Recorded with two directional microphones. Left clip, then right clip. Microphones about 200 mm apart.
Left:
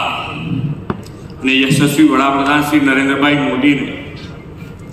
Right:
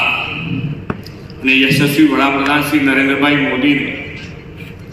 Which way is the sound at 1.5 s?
40° left (ahead or behind).